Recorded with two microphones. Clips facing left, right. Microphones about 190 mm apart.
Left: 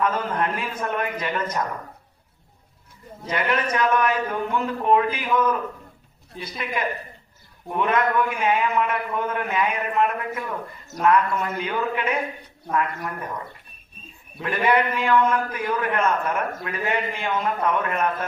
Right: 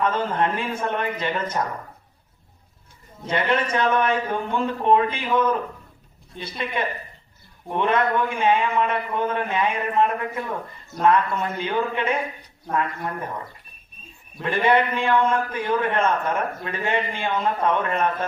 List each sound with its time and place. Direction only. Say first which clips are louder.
0.0 s a man's voice: right 1 dB; 25° right (ahead or behind)
3.2 s a man's voice: right 2 dB; 30° right (ahead or behind)
6.3 s speech: even; 5° left (ahead or behind)
7.7 s a man's voice: right 1 dB; 30° right (ahead or behind)
14.4 s a man's voice: right 1 dB; 25° right (ahead or behind)